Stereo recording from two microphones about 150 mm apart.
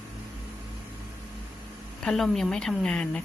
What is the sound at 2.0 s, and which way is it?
Speech, centre (ahead or behind).